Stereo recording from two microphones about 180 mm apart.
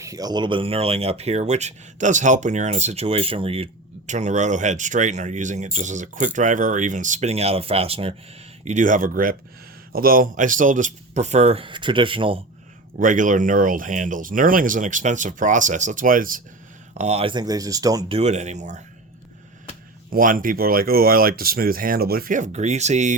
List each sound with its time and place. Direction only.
0.0 s speech: 20° right (ahead or behind)
8.6 s speech: 45° right (ahead or behind)
13.0 s speech: 45° right (ahead or behind)
17.0 s speech: 35° right (ahead or behind); by 18.0 s 20° right (ahead or behind)
18.1 s speech: 40° right (ahead or behind)
20.1 s speech: 50° right (ahead or behind)